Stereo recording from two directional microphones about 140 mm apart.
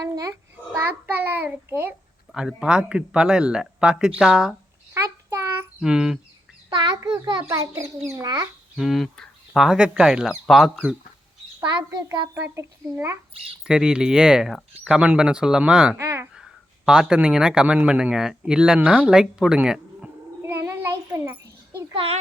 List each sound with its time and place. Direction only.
0.2 s a child's voice: 20° right (ahead or behind); by 4.5 s 5° right (ahead or behind)
4.9 s child singing: 20° right (ahead or behind)
5.8 s speech: 5° right (ahead or behind)
6.7 s a child's voice: 30° right (ahead or behind)
7.4 s a child's voice: 20° right (ahead or behind)
8.7 s speech: centre (ahead or behind)
11.8 s a child's voice: 20° right (ahead or behind)
13.7 s speech: 5° right (ahead or behind)
16.0 s a child's voice: 20° right (ahead or behind)
16.3 s speech: 5° right (ahead or behind)
20.4 s a sound: 20° right (ahead or behind)
21.9 s a child's voice: 45° right (ahead or behind)